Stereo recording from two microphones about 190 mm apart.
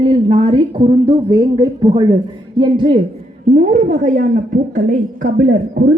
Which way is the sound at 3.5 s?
40° right (ahead or behind).